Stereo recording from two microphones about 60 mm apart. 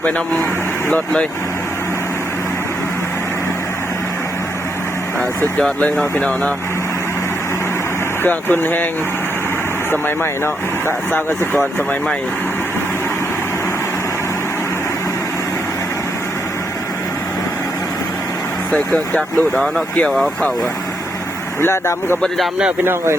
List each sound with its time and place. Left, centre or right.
8.2 s speech: left
10.4 s speech: left
18.7 s speech: centre
20.1 s speech: centre
21.6 s speech: left
22.8 s speech: right